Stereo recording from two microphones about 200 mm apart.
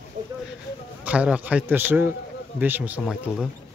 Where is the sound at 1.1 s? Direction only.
5° right (ahead or behind).